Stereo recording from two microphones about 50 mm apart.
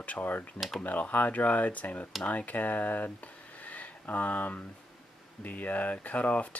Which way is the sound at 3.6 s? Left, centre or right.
Left.